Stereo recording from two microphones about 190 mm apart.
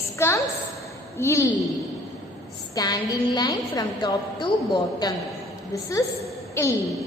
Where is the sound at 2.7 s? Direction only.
20° left (ahead or behind).